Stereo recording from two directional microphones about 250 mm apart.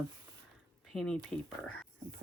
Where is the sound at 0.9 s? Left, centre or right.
Centre.